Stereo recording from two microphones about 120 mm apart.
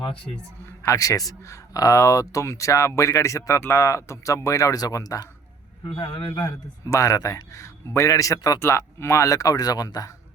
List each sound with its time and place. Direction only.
0.8 s speech: 25° left (ahead or behind)
6.0 s a man's voice: 40° left (ahead or behind)
6.8 s speech: 25° left (ahead or behind)